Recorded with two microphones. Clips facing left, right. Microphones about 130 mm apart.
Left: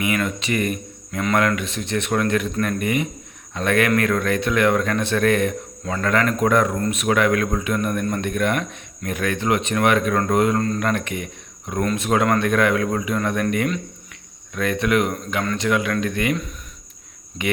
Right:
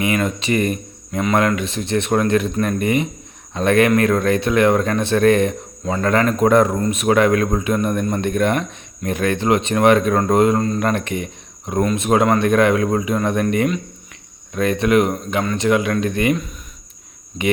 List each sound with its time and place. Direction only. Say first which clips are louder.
0.0 s a man's voice: right 3 dB; 25° right (ahead or behind)